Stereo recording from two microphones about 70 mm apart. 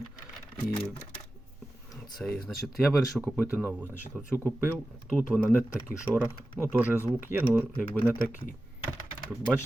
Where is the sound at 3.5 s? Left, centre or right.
Right.